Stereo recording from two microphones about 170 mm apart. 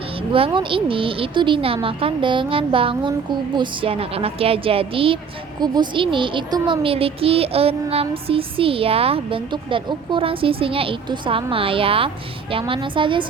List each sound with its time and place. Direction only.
0.3 s speech: 30° right (ahead or behind)